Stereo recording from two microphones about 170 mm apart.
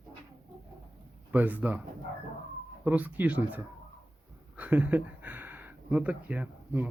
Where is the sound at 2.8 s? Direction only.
10° right (ahead or behind).